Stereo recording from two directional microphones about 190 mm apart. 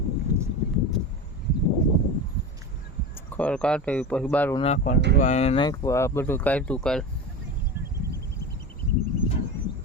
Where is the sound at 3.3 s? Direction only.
5° left (ahead or behind).